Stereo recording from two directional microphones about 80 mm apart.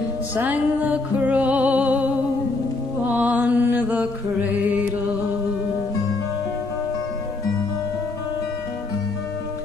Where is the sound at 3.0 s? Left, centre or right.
Centre.